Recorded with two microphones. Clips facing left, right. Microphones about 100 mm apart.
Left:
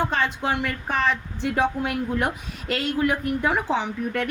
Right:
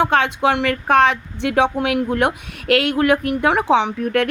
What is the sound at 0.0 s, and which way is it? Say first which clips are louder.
Speech: right 8 dB; 70° right (ahead or behind).